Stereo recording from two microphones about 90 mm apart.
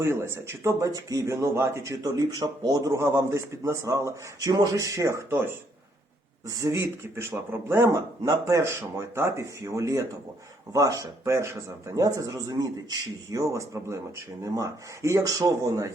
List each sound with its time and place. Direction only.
0.0 s speech: 30° right (ahead or behind)
6.6 s speech: 35° right (ahead or behind)